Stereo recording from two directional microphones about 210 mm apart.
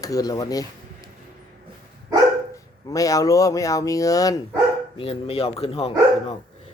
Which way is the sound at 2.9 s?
15° left (ahead or behind).